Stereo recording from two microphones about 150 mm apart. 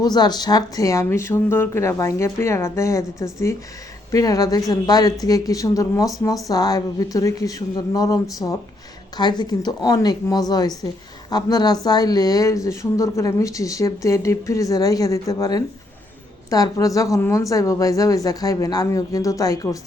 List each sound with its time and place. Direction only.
0.0 s speech: 25° left (ahead or behind)